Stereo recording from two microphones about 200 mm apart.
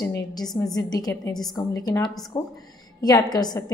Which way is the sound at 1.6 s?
20° left (ahead or behind).